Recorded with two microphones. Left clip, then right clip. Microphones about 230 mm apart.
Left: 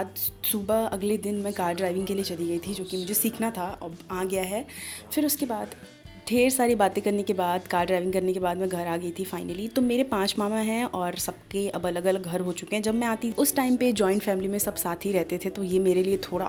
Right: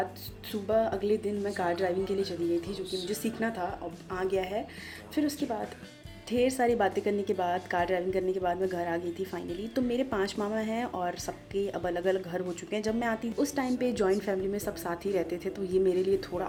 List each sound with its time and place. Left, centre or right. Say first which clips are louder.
0.4 s a woman's voice: left 2 dB; left